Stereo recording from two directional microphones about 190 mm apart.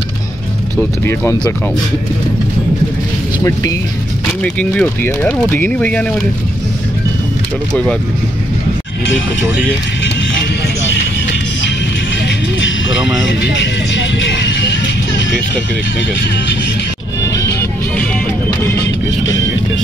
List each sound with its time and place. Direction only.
1.0 s speech: 15° left (ahead or behind)
4.4 s speech: 5° left (ahead or behind)
7.7 s speech: 5° left (ahead or behind)
9.0 s speech: 75° left (ahead or behind)
13.3 s vehicle: 65° left (ahead or behind)